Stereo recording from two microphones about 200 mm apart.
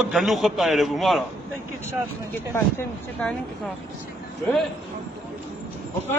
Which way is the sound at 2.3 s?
10° left (ahead or behind).